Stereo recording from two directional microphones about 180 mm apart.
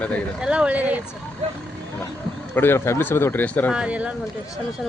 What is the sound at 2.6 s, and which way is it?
Speech, 15° left (ahead or behind).